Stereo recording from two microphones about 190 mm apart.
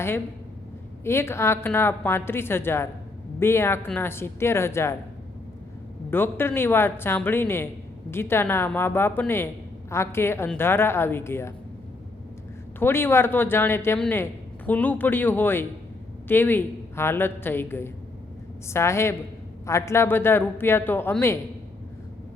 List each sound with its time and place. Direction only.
1.0 s a woman's voice: 15° left (ahead or behind)
6.1 s a woman's voice: 10° left (ahead or behind)
12.8 s a woman's voice: 10° left (ahead or behind)